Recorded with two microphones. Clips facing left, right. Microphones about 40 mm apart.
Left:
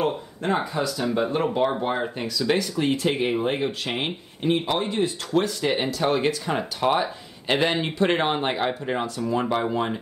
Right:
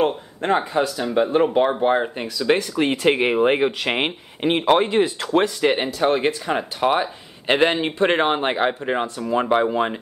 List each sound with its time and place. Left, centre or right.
0.0 s speech: right
3.0 s speech: right
5.3 s speech: right
5.9 s speech: right